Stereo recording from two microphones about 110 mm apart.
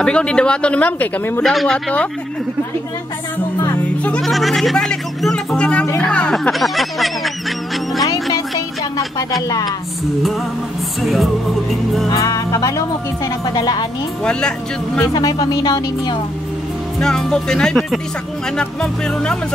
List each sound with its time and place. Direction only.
0.0 s speech: 10° left (ahead or behind)
1.4 s speech: centre (ahead or behind)
3.7 s speech: 15° left (ahead or behind)
4.2 s speech: centre (ahead or behind)
6.6 s a sound: centre (ahead or behind)
8.0 s music: 30° left (ahead or behind)
11.0 s speech: centre (ahead or behind)
12.1 s speech: 30° left (ahead or behind)
15.0 s speech: 35° left (ahead or behind)
17.0 s speech: 5° left (ahead or behind)